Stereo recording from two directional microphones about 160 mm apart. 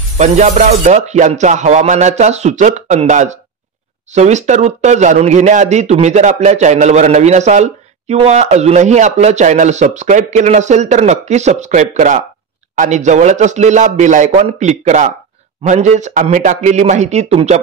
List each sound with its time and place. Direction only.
0.2 s speech: 45° right (ahead or behind)